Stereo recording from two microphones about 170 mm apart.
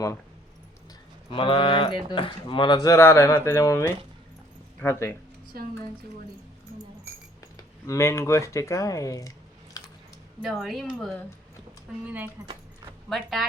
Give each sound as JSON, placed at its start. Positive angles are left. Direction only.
{"t": 1.3, "sound": "speech", "side_deg": 30}
{"t": 7.4, "sound": "speech", "side_deg": 20}
{"t": 9.7, "sound": "chewing", "side_deg": 20}
{"t": 10.4, "sound": "speech", "side_deg": 0}